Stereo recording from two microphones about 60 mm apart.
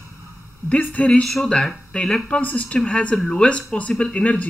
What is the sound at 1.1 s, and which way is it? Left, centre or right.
Speech, centre.